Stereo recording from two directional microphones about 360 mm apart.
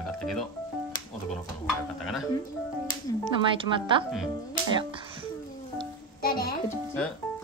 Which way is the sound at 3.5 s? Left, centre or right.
Centre.